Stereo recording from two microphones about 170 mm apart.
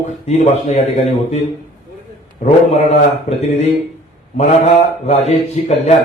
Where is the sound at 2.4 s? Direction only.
40° left (ahead or behind).